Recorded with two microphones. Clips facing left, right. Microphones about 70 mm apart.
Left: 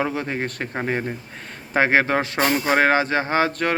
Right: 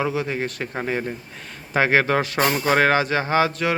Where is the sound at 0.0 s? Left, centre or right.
Left.